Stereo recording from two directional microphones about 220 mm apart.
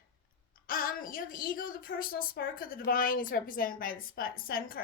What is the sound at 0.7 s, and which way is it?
A woman's voice, 40° left (ahead or behind).